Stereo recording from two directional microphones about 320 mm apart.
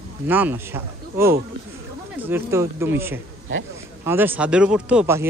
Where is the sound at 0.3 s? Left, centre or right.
Centre.